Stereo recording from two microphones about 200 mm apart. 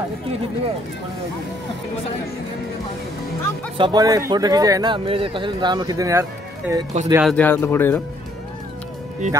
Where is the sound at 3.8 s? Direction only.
20° right (ahead or behind).